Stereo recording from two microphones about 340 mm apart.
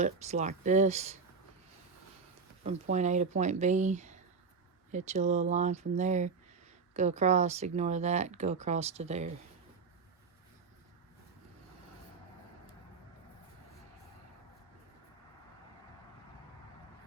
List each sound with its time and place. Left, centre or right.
0.0 s speech: right
2.9 s speech: centre